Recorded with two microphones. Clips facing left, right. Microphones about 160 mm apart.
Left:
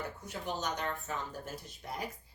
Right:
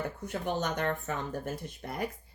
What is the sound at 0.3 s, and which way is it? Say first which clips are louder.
Speech: right 5 dB; 55° right (ahead or behind).